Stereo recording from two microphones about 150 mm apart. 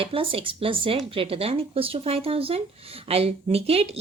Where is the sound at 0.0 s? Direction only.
40° right (ahead or behind).